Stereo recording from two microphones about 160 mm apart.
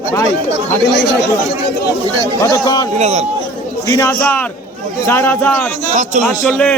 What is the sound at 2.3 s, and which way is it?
Speech, 20° left (ahead or behind).